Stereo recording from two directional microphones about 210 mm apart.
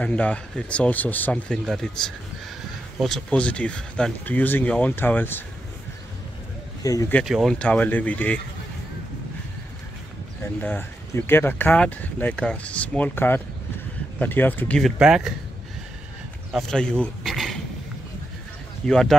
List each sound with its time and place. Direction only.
0.0 s speech: 5° left (ahead or behind)
6.8 s speech: 15° left (ahead or behind)
7.2 s speech: centre (ahead or behind)
10.6 s speech: 10° left (ahead or behind)
16.5 s speech: 5° left (ahead or behind)
18.9 s speech: centre (ahead or behind)